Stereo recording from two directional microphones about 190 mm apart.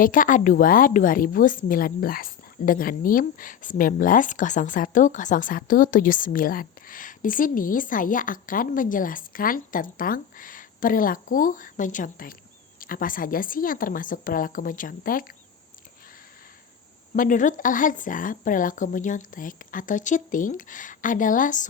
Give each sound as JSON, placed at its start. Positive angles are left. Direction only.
{"t": 0.0, "sound": "a woman's voice", "side_deg": 45}
{"t": 17.2, "sound": "a woman's voice", "side_deg": 45}